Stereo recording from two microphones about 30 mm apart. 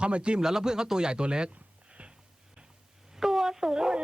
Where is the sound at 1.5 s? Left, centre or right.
Right.